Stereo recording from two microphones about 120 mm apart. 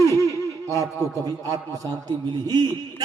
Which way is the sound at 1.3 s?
30° right (ahead or behind).